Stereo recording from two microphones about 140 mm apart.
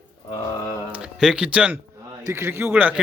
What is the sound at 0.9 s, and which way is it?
A man's voice, 5° right (ahead or behind).